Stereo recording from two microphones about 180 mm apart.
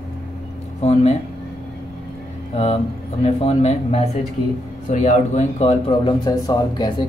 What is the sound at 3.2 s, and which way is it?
Speech, 35° left (ahead or behind).